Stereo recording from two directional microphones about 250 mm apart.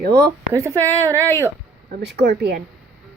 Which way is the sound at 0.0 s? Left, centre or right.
Right.